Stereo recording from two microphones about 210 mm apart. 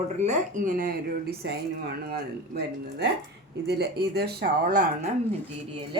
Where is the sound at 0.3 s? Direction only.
40° right (ahead or behind).